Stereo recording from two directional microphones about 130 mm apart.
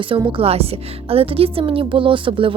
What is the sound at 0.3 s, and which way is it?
A woman's voice, 45° right (ahead or behind).